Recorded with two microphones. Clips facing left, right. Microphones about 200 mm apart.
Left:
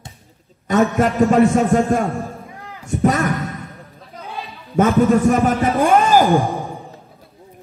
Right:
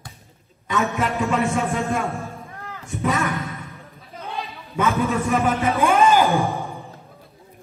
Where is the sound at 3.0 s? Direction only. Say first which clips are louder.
Left 5 dB; 40° left (ahead or behind).